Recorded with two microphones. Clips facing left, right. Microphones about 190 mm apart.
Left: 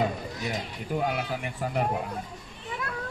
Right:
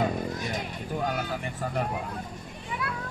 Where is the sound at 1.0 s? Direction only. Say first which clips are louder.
Right 2 dB; 10° left (ahead or behind).